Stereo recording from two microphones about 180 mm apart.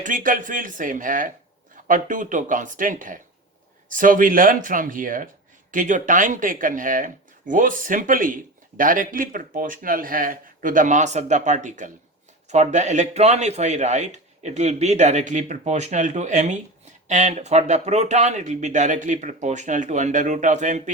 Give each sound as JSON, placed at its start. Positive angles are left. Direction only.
{"t": 0.0, "sound": "a man's voice", "side_deg": -45}